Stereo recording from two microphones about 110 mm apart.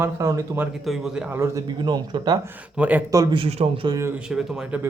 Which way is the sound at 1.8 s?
40° right (ahead or behind).